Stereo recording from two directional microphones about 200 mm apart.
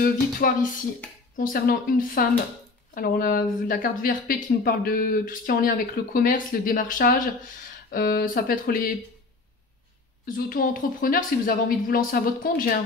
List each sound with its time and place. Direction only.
0.0 s a woman's voice: 45° left (ahead or behind)
10.2 s a woman's voice: 45° left (ahead or behind)